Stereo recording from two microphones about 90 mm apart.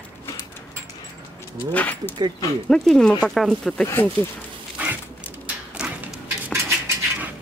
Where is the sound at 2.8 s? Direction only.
5° left (ahead or behind).